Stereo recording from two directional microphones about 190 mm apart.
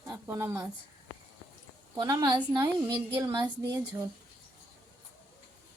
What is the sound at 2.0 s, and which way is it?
A woman's voice, 20° right (ahead or behind).